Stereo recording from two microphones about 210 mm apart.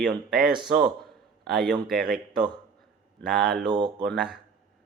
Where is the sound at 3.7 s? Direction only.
20° right (ahead or behind).